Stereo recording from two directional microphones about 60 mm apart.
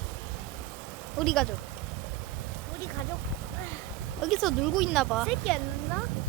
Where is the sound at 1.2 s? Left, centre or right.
Centre.